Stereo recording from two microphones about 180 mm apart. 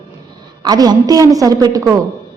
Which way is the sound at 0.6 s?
20° right (ahead or behind).